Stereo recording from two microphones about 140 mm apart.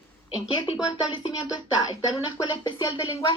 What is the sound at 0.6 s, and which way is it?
Speech, 40° left (ahead or behind).